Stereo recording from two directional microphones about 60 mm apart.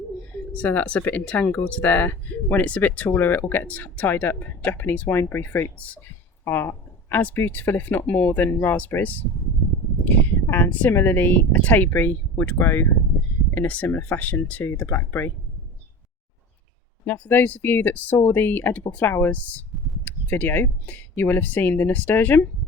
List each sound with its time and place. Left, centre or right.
0.5 s speech: left
6.4 s a sound: left
7.3 s speech: left
10.4 s a sound: left
10.7 s speech: left
14.6 s speech: left
17.1 s speech: left